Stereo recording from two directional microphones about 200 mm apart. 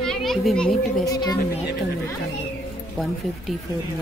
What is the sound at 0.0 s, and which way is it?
A child's voice, centre (ahead or behind).